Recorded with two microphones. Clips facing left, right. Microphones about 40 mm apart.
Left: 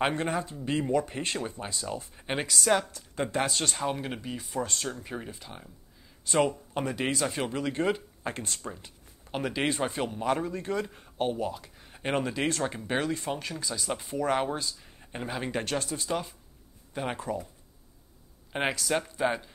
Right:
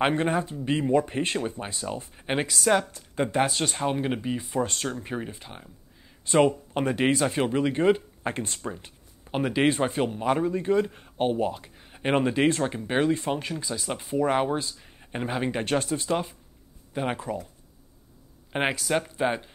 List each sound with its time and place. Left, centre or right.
0.0 s speech: right
2.1 s speech: centre
4.6 s speech: right
4.9 s speech: right
9.3 s speech: centre
11.1 s speech: right
12.6 s speech: centre
15.6 s speech: right
16.9 s speech: centre
18.5 s speech: centre